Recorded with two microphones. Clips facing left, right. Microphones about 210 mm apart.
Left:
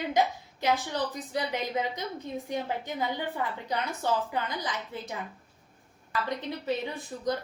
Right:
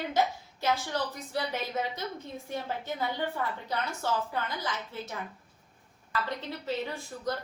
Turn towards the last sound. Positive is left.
turn(degrees=15)  # may be behind; listen again after turning